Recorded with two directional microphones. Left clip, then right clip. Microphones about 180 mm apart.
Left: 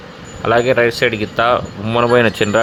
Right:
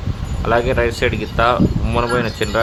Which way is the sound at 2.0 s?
25° left (ahead or behind).